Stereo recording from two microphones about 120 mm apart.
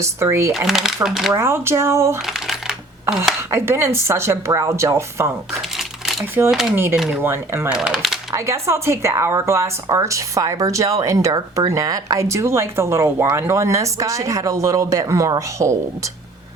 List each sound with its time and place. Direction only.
0.0 s a woman's voice: 20° right (ahead or behind)
0.7 s speech: centre (ahead or behind)
1.4 s a woman's voice: 20° right (ahead or behind)
2.2 s coin: 5° right (ahead or behind)
3.5 s a woman's voice: 20° right (ahead or behind)
5.7 s a sound: centre (ahead or behind)
6.5 s speech: 5° right (ahead or behind)
7.1 s a woman's voice: 20° right (ahead or behind)
7.7 s speech: 5° right (ahead or behind)
8.3 s a woman's voice: 25° right (ahead or behind)